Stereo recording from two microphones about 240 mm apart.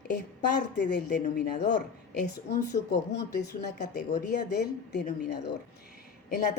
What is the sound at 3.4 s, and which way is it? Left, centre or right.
A woman's voice, left.